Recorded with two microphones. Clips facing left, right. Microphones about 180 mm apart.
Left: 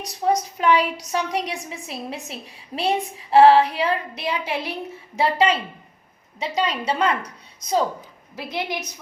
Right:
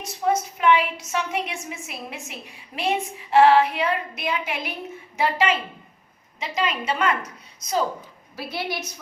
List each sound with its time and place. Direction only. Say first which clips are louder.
0.0 s a woman's voice: left 1 dB; 35° left (ahead or behind)
6.6 s a woman's voice: left 2 dB; 35° left (ahead or behind)
8.4 s a woman's voice: left 2 dB; 20° left (ahead or behind)